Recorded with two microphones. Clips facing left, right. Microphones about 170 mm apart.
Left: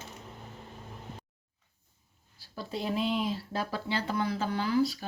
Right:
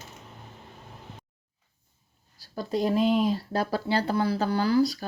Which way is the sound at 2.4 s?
40° right (ahead or behind).